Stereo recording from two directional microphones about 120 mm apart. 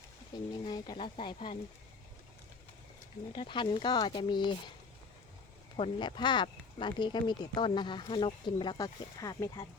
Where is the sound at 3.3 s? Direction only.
45° left (ahead or behind).